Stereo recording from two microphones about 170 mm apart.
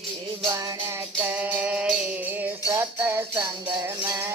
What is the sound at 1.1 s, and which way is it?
Music, 10° right (ahead or behind).